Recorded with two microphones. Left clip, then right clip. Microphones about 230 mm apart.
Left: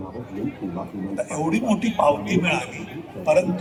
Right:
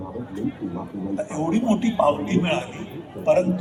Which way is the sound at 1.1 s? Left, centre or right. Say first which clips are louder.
Left 1 dB; left.